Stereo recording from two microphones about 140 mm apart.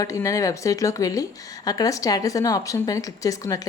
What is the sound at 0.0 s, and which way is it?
A woman's voice, 25° left (ahead or behind).